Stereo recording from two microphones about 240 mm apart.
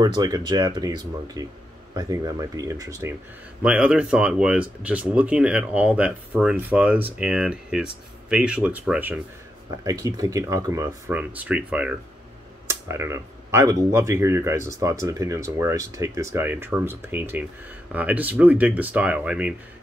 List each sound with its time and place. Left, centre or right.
0.0 s speech: centre